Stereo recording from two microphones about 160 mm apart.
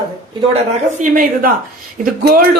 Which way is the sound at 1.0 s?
55° right (ahead or behind).